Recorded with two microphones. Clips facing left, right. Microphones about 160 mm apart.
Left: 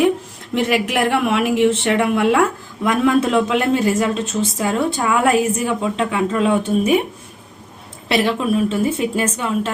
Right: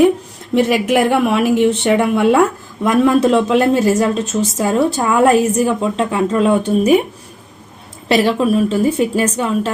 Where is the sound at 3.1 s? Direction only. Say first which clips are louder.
Right 2 dB; 40° right (ahead or behind).